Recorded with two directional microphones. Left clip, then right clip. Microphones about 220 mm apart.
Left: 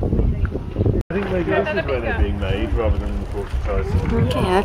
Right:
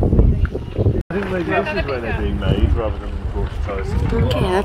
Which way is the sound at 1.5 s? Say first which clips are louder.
Even; 25° right (ahead or behind).